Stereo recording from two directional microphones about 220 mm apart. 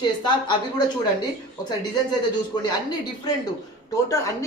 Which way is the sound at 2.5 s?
20° left (ahead or behind).